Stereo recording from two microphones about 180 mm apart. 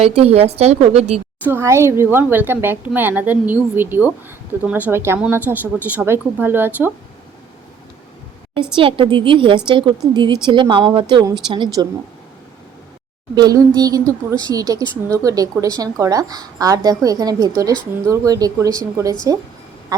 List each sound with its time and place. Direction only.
0.0 s a woman's voice: 35° right (ahead or behind)
1.5 s speech: 15° right (ahead or behind)
8.7 s a woman's voice: 30° right (ahead or behind)
13.3 s a woman's voice: 20° right (ahead or behind)